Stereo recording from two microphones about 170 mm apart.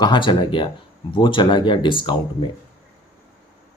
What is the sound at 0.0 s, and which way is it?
Speech, 25° left (ahead or behind).